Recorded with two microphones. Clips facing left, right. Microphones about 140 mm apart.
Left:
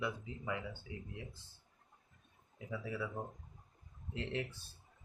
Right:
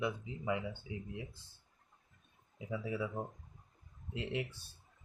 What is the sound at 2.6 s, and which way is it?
Speech, 15° right (ahead or behind).